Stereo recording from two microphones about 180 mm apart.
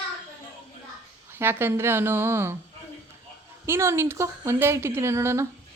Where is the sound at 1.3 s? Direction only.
10° right (ahead or behind).